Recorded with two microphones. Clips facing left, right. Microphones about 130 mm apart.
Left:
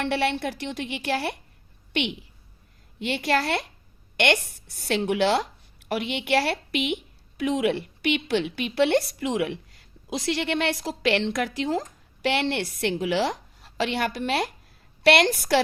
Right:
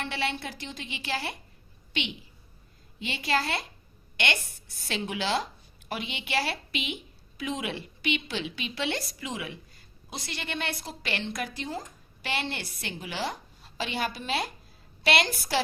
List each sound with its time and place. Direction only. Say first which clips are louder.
0.0 s a woman's voice: left 7 dB; 65° left (ahead or behind)
4.9 s a woman's voice: left 8 dB; 65° left (ahead or behind)
10.1 s a woman's voice: left 11 dB; 90° left
12.2 s a woman's voice: left 9 dB; 75° left (ahead or behind)